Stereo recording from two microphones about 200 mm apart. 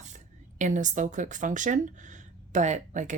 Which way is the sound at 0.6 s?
40° right (ahead or behind).